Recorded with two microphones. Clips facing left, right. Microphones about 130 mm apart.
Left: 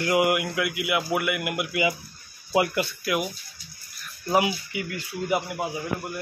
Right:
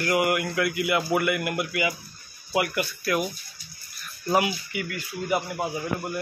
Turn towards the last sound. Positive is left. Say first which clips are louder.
# right 1 dB
turn(degrees=0)  # may be behind; listen again after turning